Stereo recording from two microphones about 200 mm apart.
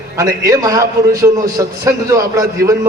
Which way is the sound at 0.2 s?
15° right (ahead or behind).